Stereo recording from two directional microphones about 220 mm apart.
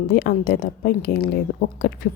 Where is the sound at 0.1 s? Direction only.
45° left (ahead or behind).